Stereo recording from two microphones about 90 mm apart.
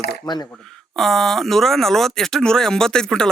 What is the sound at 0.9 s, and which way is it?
Speech, 5° left (ahead or behind).